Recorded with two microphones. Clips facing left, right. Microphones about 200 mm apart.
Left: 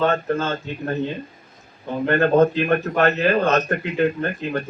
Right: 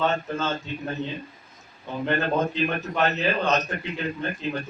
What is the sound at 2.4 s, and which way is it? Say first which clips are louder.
A man's voice: left 8 dB; 55° left (ahead or behind).